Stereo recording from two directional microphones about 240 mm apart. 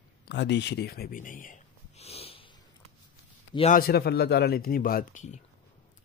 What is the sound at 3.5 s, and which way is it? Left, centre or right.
Speech, left.